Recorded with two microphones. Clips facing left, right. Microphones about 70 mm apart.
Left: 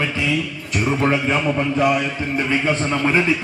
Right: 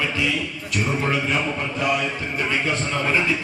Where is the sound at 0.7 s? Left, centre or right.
Left.